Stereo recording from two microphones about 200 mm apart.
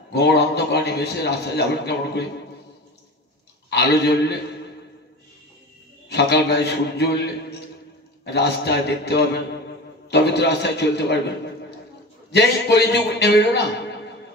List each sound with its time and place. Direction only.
0.1 s a man's voice: 55° left (ahead or behind)
3.7 s a man's voice: 55° left (ahead or behind)
6.0 s a man's voice: 55° left (ahead or behind)
12.3 s a man's voice: 55° left (ahead or behind)